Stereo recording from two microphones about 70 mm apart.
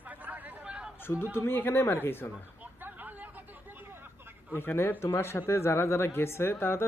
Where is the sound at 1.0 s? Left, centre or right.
Left.